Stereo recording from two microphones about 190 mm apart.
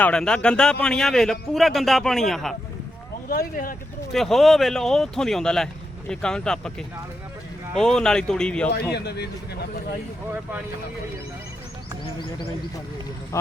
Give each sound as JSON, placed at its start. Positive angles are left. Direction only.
{"t": 0.0, "sound": "a man's voice", "side_deg": 5}
{"t": 3.2, "sound": "speech", "side_deg": 50}
{"t": 4.1, "sound": "a man's voice", "side_deg": 0}
{"t": 8.9, "sound": "speech", "side_deg": 60}
{"t": 13.3, "sound": "speech", "side_deg": 15}